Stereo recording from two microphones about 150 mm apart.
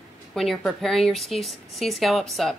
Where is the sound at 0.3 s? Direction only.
Centre (ahead or behind).